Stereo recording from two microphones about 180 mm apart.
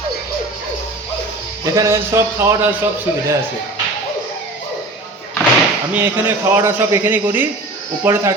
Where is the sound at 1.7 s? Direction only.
15° right (ahead or behind).